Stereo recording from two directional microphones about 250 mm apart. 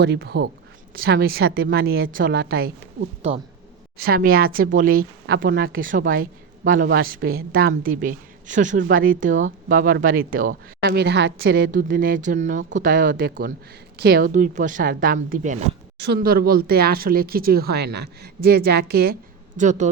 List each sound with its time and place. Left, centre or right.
0.0 s speech: right
3.2 s speech: right
3.9 s speech: right